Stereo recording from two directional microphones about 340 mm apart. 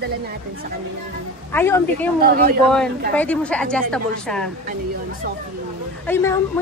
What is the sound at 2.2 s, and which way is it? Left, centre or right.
Speech, right.